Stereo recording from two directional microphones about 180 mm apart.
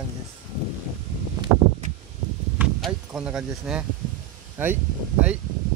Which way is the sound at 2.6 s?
5° right (ahead or behind).